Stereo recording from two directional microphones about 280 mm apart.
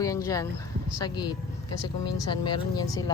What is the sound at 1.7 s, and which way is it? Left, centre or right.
Speech, left.